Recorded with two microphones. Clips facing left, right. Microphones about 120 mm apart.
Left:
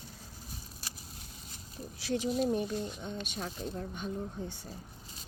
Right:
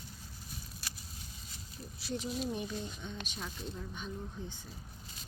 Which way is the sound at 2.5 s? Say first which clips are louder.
Left 6 dB; 40° left (ahead or behind).